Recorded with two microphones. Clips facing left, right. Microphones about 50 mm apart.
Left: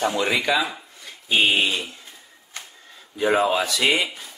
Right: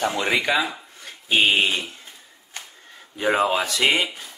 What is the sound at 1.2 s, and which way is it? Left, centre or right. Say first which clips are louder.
Speech: right 1 dB; right.